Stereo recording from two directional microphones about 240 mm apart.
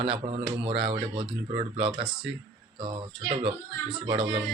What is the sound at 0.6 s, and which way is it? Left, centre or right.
Speech, right.